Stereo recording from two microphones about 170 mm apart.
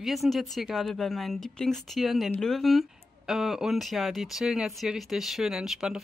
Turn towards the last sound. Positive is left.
turn(degrees=-5)  # may be behind; listen again after turning